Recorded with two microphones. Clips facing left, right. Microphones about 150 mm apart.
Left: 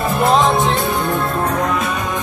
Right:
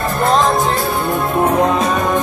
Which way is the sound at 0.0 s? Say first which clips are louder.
Even; 5° left (ahead or behind).